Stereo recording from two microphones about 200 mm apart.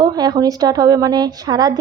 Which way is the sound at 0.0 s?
20° right (ahead or behind).